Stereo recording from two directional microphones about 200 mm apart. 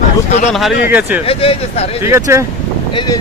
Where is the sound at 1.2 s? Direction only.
30° left (ahead or behind).